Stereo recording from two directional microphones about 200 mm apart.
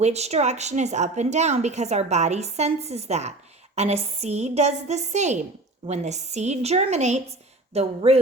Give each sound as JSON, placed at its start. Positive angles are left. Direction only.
{"t": 0.0, "sound": "speech", "side_deg": -35}